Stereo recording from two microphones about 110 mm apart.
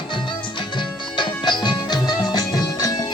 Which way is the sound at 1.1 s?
45° left (ahead or behind).